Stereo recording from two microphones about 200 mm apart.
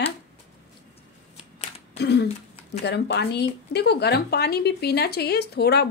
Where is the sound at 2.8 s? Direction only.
55° left (ahead or behind).